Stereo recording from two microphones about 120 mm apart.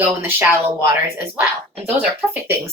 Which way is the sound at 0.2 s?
15° right (ahead or behind).